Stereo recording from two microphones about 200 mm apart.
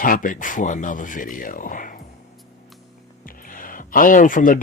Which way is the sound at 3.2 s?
45° left (ahead or behind).